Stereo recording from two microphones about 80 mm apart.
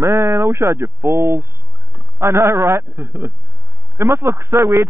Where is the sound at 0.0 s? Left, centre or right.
Right.